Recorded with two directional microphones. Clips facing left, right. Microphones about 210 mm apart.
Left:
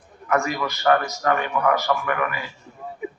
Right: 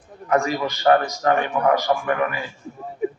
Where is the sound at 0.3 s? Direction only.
30° right (ahead or behind).